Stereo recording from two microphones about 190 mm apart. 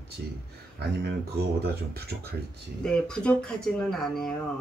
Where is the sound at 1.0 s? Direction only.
60° right (ahead or behind).